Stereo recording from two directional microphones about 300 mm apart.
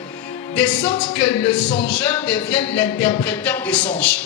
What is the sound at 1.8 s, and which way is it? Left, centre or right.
Speech, centre.